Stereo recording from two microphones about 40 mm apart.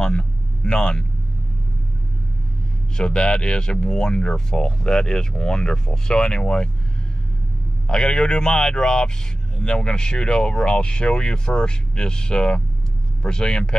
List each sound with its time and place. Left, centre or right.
0.0 s vehicle: left
3.0 s speech: left
7.8 s speech: centre